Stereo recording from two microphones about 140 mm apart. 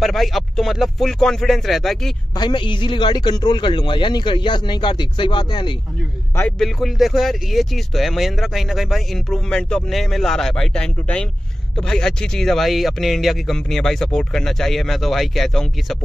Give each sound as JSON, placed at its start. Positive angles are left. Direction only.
{"t": 0.0, "sound": "speech", "side_deg": 0}
{"t": 2.3, "sound": "a man's voice", "side_deg": 35}
{"t": 6.6, "sound": "speech", "side_deg": 0}